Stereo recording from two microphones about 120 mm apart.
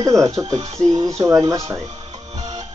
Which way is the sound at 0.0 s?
30° right (ahead or behind).